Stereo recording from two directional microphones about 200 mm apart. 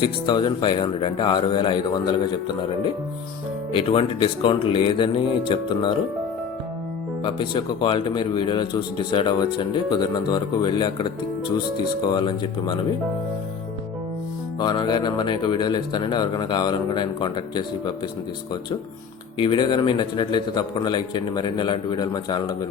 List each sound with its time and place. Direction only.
0.0 s speech: 20° left (ahead or behind)
7.3 s speech: 25° left (ahead or behind)
14.6 s speech: 20° left (ahead or behind)
19.4 s speech: 25° left (ahead or behind)